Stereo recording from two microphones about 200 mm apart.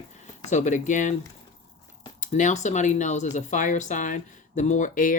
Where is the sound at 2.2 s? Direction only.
35° left (ahead or behind).